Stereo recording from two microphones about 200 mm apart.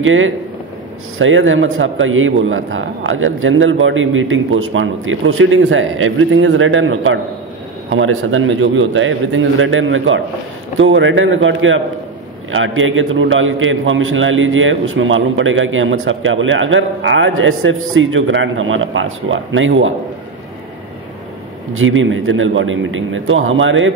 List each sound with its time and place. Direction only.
0.0 s a man's voice: 80° right
21.7 s a man's voice: 80° right